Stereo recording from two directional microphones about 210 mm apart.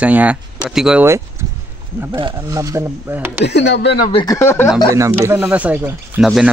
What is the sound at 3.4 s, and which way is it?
Speech, 55° left (ahead or behind).